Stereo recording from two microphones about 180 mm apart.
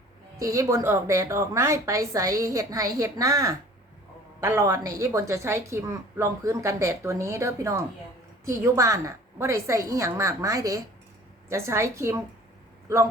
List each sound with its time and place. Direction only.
0.3 s a woman's voice: 20° right (ahead or behind)